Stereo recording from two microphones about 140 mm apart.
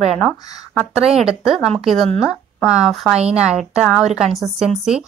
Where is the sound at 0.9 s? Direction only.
5° right (ahead or behind).